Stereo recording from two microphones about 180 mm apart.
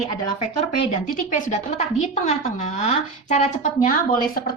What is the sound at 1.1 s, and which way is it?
A woman's voice, 45° left (ahead or behind).